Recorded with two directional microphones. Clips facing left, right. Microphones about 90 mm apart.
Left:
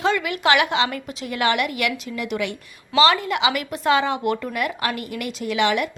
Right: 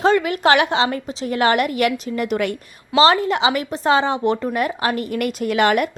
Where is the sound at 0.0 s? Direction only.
40° right (ahead or behind).